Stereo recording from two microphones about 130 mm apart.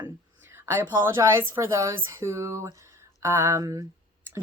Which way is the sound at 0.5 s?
20° right (ahead or behind).